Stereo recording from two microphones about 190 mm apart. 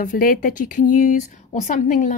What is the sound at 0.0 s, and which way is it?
Speech, 45° left (ahead or behind).